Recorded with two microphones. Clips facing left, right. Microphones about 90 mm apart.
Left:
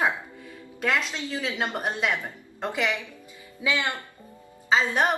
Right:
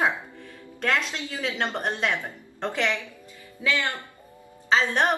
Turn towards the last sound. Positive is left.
turn(degrees=5)  # may be behind; listen again after turning